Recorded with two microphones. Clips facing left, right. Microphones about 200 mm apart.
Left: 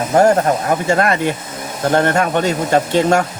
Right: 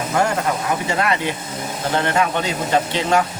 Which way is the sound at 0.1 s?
40° left (ahead or behind).